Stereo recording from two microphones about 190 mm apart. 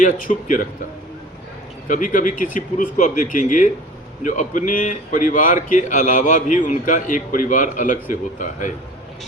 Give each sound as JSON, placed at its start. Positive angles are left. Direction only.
{"t": 0.0, "sound": "a man's voice", "side_deg": 45}
{"t": 1.9, "sound": "a man's voice", "side_deg": 45}